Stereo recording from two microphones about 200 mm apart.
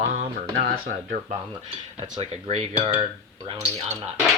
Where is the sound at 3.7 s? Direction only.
30° right (ahead or behind).